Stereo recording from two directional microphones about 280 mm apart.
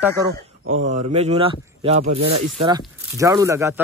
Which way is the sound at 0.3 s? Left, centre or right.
Right.